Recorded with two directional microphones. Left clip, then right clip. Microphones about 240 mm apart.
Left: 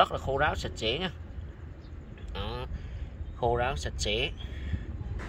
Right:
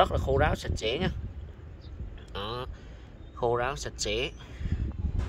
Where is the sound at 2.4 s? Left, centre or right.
Centre.